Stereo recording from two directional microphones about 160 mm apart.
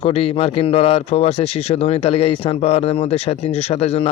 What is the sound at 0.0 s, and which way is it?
Speech, 35° left (ahead or behind).